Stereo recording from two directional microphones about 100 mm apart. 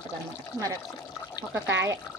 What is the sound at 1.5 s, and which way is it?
Speech, 25° right (ahead or behind).